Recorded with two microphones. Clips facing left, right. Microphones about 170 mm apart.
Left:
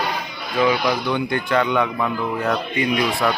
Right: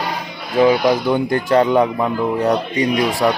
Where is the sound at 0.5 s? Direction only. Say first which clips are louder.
Right 6 dB; 35° right (ahead or behind).